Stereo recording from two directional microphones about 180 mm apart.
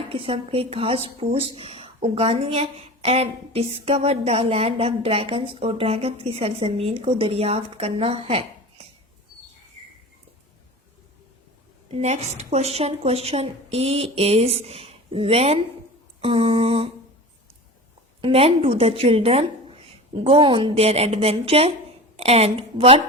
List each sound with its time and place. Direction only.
0.1 s speech: 30° right (ahead or behind)
11.9 s speech: 35° right (ahead or behind)
16.2 s a sound: 30° right (ahead or behind)
18.2 s speech: 30° right (ahead or behind)